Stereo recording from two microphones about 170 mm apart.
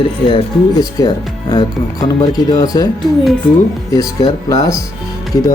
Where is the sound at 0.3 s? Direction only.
25° left (ahead or behind).